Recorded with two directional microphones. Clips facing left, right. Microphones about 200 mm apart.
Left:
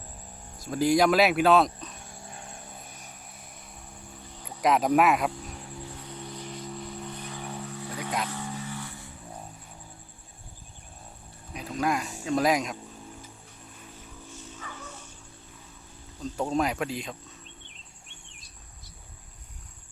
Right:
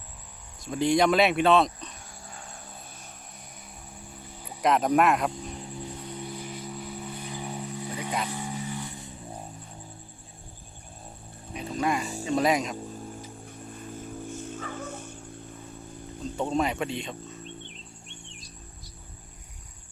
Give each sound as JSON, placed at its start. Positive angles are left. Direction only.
{"t": 0.6, "sound": "speech", "side_deg": 0}
{"t": 2.2, "sound": "vehicle", "side_deg": 25}
{"t": 4.4, "sound": "cricket", "side_deg": 0}
{"t": 4.9, "sound": "speech", "side_deg": 5}
{"t": 5.3, "sound": "music", "side_deg": -15}
{"t": 8.3, "sound": "vehicle", "side_deg": -15}
{"t": 11.5, "sound": "music", "side_deg": 0}
{"t": 12.2, "sound": "speech", "side_deg": 0}
{"t": 14.3, "sound": "dog", "side_deg": -50}
{"t": 16.4, "sound": "speech", "side_deg": 0}